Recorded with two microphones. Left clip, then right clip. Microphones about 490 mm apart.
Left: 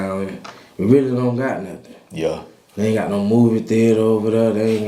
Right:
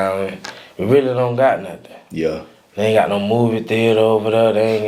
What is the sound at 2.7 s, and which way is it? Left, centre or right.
Speech, right.